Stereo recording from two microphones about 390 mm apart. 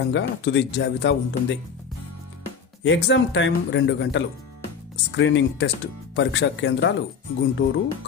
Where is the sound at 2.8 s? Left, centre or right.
Left.